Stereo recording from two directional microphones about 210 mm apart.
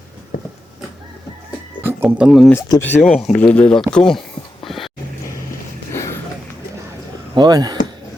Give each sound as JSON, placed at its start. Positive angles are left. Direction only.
{"t": 1.8, "sound": "speech", "side_deg": -10}
{"t": 2.5, "sound": "speech", "side_deg": 15}
{"t": 4.6, "sound": "music", "side_deg": 0}
{"t": 7.3, "sound": "speech", "side_deg": -20}